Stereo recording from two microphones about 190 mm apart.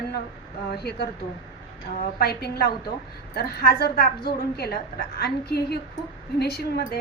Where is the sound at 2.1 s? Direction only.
55° left (ahead or behind).